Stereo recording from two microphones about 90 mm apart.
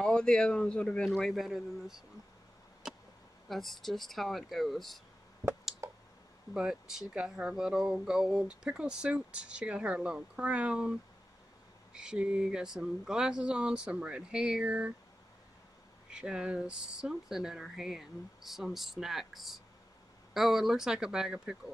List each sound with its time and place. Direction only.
0.0 s speech: 10° left (ahead or behind)
1.3 s speech: centre (ahead or behind)
3.4 s speech: centre (ahead or behind)
5.8 s clicking: 30° right (ahead or behind)
6.5 s speech: 5° right (ahead or behind)
16.1 s speech: 10° right (ahead or behind)